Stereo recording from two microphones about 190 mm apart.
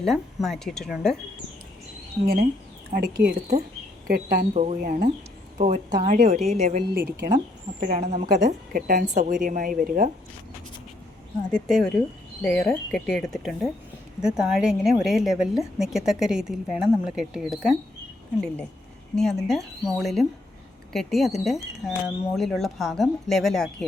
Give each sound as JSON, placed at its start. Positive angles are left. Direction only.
{"t": 0.0, "sound": "speech", "side_deg": 0}
{"t": 2.2, "sound": "speech", "side_deg": -50}
{"t": 4.5, "sound": "a woman's voice", "side_deg": -40}
{"t": 11.5, "sound": "speech", "side_deg": 0}
{"t": 19.1, "sound": "speech", "side_deg": 0}